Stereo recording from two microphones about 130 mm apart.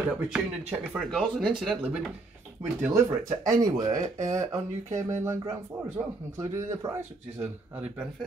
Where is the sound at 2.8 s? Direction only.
20° right (ahead or behind).